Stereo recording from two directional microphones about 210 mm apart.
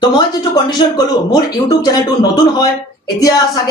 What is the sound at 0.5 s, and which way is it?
A woman's voice, 20° left (ahead or behind).